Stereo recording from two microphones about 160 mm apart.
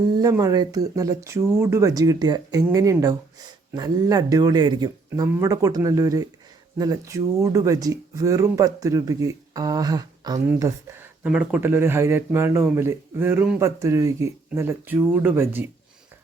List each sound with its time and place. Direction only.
0.2 s speech: 20° right (ahead or behind)
11.2 s speech: 10° right (ahead or behind)